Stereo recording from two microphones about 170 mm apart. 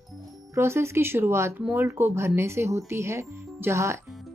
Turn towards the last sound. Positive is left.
turn(degrees=-15)  # may be behind; listen again after turning